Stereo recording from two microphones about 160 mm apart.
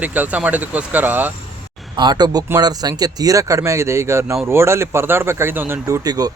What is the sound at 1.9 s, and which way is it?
Speech, 25° right (ahead or behind).